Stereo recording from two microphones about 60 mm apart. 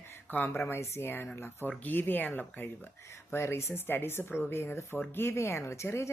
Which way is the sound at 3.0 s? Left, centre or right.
Left.